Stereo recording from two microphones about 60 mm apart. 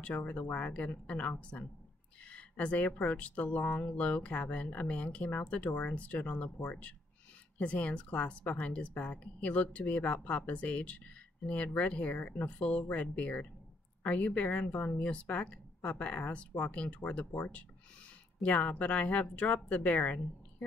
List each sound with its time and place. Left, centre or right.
0.0 s a woman's voice: left